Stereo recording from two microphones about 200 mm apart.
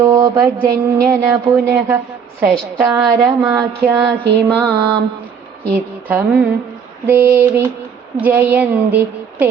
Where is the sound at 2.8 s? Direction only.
5° right (ahead or behind).